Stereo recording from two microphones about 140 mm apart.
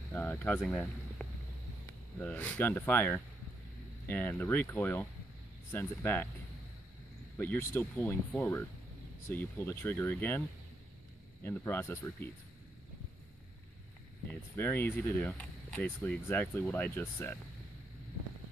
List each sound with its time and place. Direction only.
0.1 s a sound: 15° left (ahead or behind)
0.6 s speech: 10° left (ahead or behind)
7.3 s speech: 15° left (ahead or behind)
11.4 s speech: 15° left (ahead or behind)
14.2 s speech: 15° left (ahead or behind)